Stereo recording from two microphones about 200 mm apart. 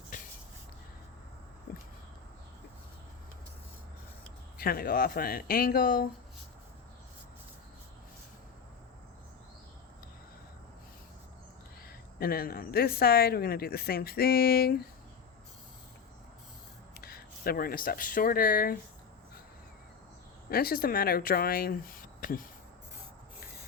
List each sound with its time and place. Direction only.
0.1 s a sound: 40° left (ahead or behind)
4.5 s speech: 50° left (ahead or behind)
12.2 s speech: 50° left (ahead or behind)
17.0 s speech: 50° left (ahead or behind)
20.5 s speech: 50° left (ahead or behind)